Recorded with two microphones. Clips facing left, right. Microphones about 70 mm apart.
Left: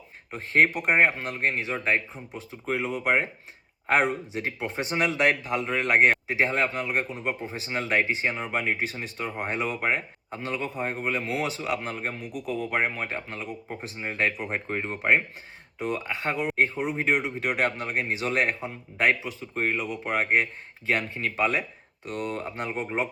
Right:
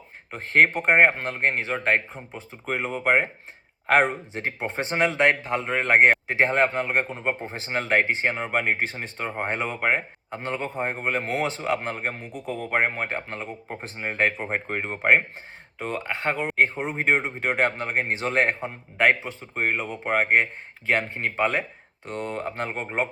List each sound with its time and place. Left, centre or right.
0.3 s speech: right